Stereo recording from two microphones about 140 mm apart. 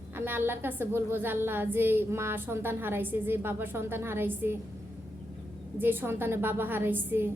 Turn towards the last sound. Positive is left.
turn(degrees=-15)  # may be behind; listen again after turning